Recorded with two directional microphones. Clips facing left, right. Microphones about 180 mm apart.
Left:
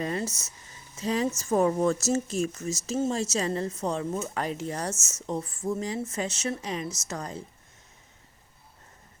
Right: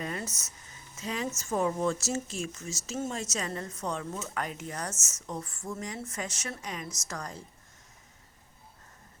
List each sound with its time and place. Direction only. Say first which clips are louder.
0.0 s a sound: left 6 dB; 30° left (ahead or behind)
0.3 s speech: left 6 dB; 10° left (ahead or behind)
0.9 s a woman's voice: left 7 dB; 35° left (ahead or behind)
4.9 s speech: left 3 dB; 10° left (ahead or behind)
5.2 s speech: left 7 dB; 25° left (ahead or behind)